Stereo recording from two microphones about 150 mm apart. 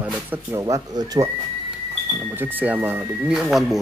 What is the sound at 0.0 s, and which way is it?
Speech, 15° right (ahead or behind).